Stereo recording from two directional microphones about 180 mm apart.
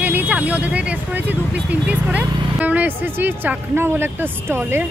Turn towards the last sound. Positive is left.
turn(degrees=-15)  # may be behind; listen again after turning